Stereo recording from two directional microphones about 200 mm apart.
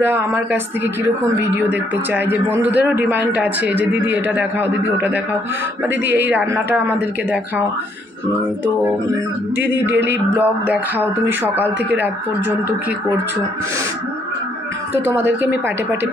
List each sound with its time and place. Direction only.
0.0 s a man's voice: 10° right (ahead or behind)
9.6 s speech: 60° right (ahead or behind)
10.3 s a man's voice: 10° right (ahead or behind)